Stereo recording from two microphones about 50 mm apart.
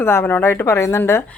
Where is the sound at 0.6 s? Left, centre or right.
Left.